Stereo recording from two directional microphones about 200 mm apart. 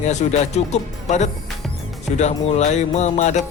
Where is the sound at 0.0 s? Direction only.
35° left (ahead or behind).